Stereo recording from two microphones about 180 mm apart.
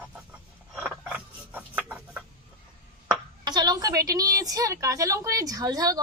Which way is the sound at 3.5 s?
20° right (ahead or behind).